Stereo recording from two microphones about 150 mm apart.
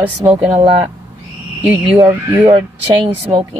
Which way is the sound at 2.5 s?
35° right (ahead or behind).